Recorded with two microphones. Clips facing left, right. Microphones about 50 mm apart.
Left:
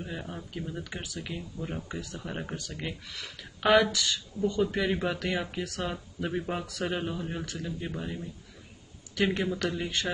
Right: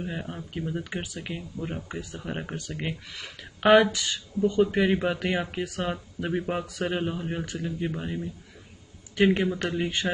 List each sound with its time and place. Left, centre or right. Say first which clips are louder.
0.0 s speech: right 4 dB; centre
9.1 s a man's voice: right 5 dB; right